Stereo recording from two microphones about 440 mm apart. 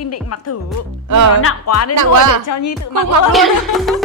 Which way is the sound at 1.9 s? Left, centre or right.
Right.